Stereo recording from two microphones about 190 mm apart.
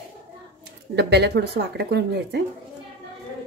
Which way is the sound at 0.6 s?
60° right (ahead or behind).